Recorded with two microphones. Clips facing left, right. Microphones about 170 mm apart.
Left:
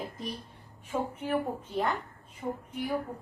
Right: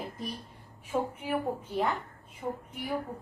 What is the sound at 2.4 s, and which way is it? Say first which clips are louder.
Speech: even; 5° right (ahead or behind).